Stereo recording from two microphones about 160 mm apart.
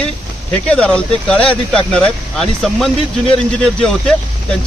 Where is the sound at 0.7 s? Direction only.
5° left (ahead or behind).